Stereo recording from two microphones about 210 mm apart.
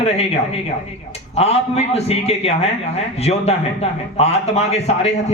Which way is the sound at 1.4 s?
30° left (ahead or behind).